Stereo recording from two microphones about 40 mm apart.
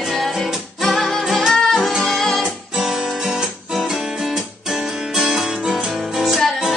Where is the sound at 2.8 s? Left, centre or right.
Centre.